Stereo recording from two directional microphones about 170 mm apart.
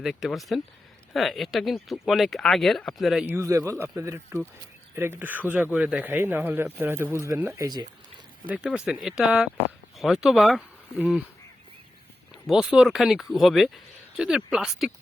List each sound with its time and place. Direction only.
0.0 s speech: centre (ahead or behind)
3.2 s speech: 15° right (ahead or behind)
8.4 s speech: 5° right (ahead or behind)
12.3 s speech: 5° right (ahead or behind)